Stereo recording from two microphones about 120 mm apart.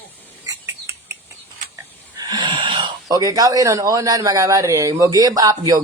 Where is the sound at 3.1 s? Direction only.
30° right (ahead or behind).